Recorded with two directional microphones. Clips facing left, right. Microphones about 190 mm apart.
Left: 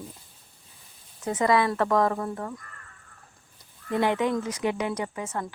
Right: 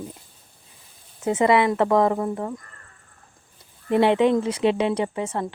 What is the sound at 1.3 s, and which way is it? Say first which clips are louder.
Speech: right 4 dB; 25° right (ahead or behind).